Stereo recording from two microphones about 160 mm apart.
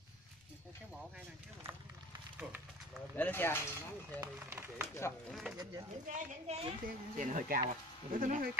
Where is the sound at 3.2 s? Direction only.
15° left (ahead or behind).